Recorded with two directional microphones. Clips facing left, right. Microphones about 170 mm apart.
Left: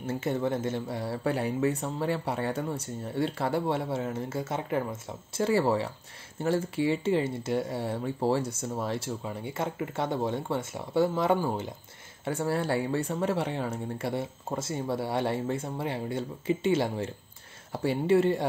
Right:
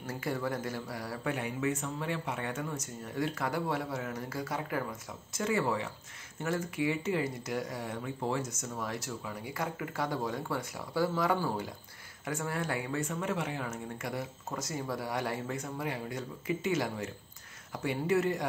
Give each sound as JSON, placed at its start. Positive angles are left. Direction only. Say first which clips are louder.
{"t": 0.0, "sound": "speech", "louder": "left 6 dB", "side_deg": 25}